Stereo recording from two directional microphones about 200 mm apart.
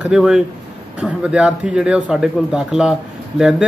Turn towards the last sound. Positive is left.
turn(degrees=-5)  # may be behind; listen again after turning